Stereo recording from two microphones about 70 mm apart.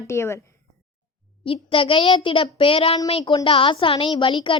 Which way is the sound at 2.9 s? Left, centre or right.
Left.